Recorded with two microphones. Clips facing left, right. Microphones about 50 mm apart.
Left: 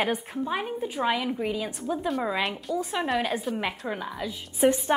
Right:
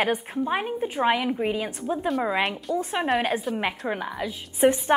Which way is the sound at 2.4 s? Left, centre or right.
Centre.